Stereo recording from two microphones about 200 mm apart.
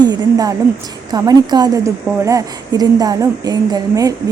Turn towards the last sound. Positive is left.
turn(degrees=-20)  # may be behind; listen again after turning